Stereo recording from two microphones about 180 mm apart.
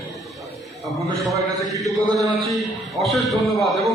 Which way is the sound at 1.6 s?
Centre (ahead or behind).